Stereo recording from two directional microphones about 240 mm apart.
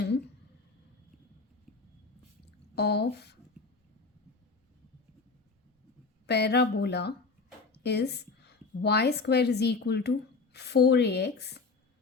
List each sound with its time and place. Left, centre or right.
1.7 s a sound: centre
2.7 s speech: left
6.2 s a woman's voice: left